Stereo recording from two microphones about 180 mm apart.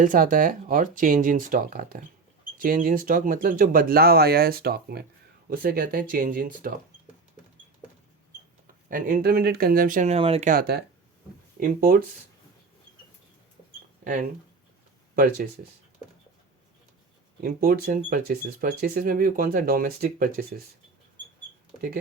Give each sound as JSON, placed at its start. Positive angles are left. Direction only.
{"t": 0.0, "sound": "speech", "side_deg": -50}
{"t": 8.6, "sound": "speech", "side_deg": -50}
{"t": 10.5, "sound": "speech", "side_deg": -60}
{"t": 17.4, "sound": "speech", "side_deg": -50}